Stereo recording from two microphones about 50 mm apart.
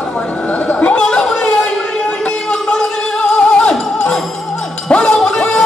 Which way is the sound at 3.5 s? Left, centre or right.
Centre.